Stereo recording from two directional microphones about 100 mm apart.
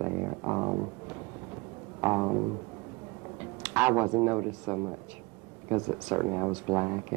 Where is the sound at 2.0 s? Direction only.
25° right (ahead or behind).